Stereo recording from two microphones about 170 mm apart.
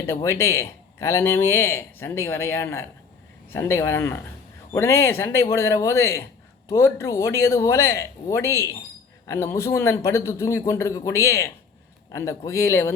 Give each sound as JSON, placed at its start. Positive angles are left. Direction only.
{"t": 0.0, "sound": "speech", "side_deg": 15}